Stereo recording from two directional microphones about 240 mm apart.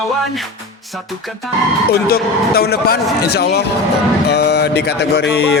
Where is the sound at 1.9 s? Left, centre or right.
Left.